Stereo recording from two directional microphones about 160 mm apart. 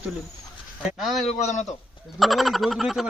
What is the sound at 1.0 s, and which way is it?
Speech, centre (ahead or behind).